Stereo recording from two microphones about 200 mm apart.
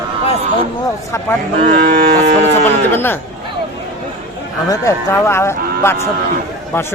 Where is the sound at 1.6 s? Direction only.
40° right (ahead or behind).